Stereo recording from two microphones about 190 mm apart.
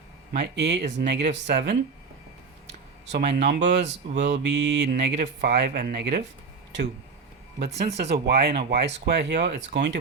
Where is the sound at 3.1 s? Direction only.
55° right (ahead or behind).